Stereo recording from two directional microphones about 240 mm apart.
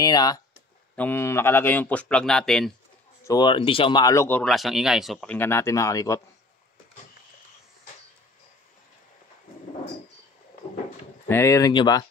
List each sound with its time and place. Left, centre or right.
0.0 s speech: centre
3.3 s speech: centre
11.2 s speech: centre